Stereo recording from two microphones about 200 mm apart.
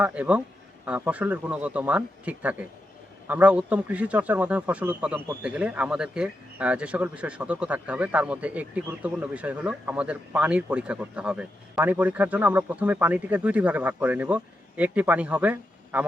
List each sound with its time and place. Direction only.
0.0 s speech: 5° right (ahead or behind)